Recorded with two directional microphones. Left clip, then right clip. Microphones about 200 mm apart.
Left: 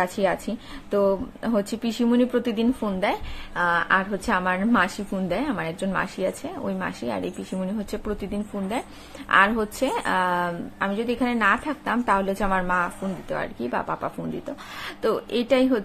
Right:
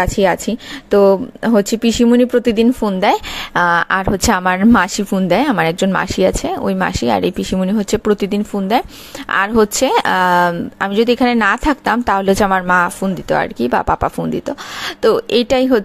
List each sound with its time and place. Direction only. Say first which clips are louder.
0.0 s speech: right 9 dB; 45° right (ahead or behind)